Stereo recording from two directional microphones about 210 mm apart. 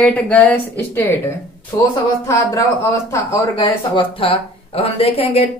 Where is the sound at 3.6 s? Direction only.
25° left (ahead or behind).